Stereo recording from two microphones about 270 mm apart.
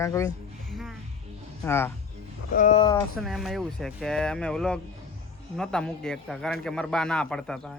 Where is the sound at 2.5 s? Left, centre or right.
Left.